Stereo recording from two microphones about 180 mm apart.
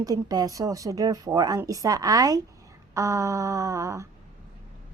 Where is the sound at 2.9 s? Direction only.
15° right (ahead or behind).